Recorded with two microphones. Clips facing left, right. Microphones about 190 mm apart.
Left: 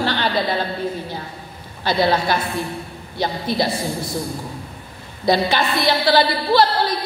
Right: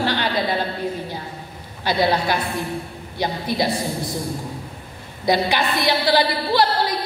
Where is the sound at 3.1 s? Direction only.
15° right (ahead or behind).